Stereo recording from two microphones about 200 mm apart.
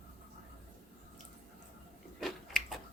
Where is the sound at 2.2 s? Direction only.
Centre (ahead or behind).